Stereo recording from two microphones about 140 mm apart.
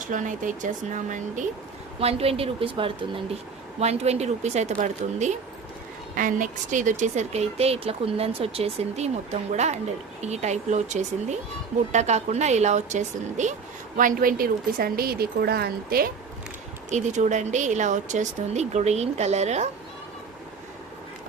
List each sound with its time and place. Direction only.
0.0 s speech: 65° right (ahead or behind)
2.0 s speech: 45° right (ahead or behind)
3.8 s speech: 50° right (ahead or behind)
6.1 s speech: 70° right (ahead or behind)
13.9 s a woman's voice: 80° right
16.9 s speech: 60° right (ahead or behind)